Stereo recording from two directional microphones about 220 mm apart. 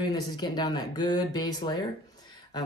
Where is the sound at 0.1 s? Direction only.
20° left (ahead or behind).